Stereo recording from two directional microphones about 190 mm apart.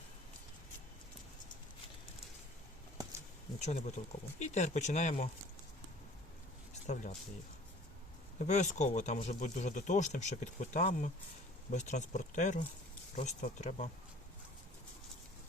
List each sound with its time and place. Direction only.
3.6 s speech: 35° left (ahead or behind)
6.8 s speech: 40° left (ahead or behind)
8.4 s speech: 40° left (ahead or behind)